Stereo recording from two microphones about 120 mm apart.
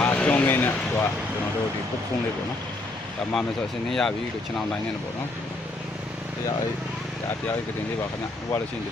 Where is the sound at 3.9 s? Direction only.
5° left (ahead or behind).